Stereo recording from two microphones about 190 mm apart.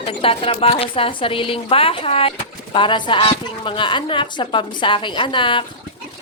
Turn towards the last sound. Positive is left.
turn(degrees=25)  # may be behind; listen again after turning